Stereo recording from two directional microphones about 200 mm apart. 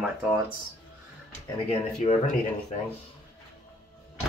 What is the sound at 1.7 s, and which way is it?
Speech, 35° left (ahead or behind).